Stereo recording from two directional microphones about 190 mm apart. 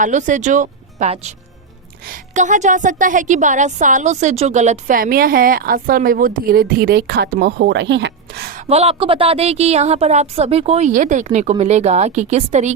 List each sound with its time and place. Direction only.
0.0 s a woman's voice: 40° right (ahead or behind)
8.6 s a woman's voice: 30° right (ahead or behind)